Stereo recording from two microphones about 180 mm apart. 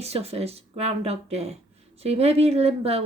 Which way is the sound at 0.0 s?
35° right (ahead or behind).